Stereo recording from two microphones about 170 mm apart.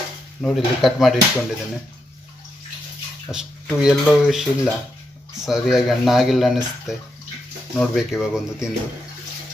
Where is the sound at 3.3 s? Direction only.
5° right (ahead or behind).